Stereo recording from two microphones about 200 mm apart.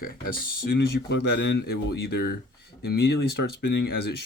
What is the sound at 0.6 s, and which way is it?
Speech, 60° left (ahead or behind).